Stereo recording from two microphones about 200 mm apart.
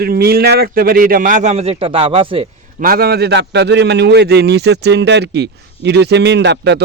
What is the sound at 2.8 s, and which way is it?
A man's voice, 50° right (ahead or behind).